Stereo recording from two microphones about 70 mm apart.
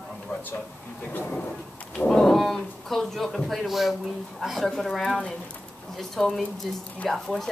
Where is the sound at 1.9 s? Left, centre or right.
Centre.